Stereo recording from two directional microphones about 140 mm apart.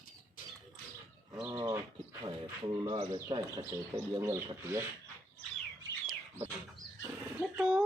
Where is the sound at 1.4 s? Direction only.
25° right (ahead or behind).